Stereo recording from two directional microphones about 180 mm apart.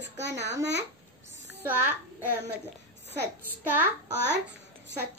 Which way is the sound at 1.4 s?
75° right (ahead or behind).